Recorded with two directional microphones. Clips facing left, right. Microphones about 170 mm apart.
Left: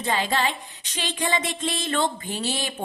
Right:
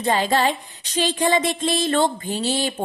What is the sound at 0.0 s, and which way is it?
Music, 40° right (ahead or behind).